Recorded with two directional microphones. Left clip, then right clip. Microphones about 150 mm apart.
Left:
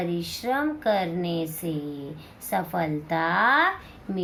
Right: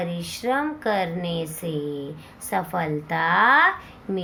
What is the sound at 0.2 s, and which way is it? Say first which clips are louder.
Speech: right 2 dB; 45° right (ahead or behind).